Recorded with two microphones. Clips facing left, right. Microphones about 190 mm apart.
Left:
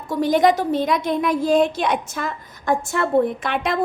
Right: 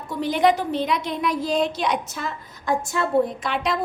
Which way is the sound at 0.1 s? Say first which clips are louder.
Left 3 dB; 45° left (ahead or behind).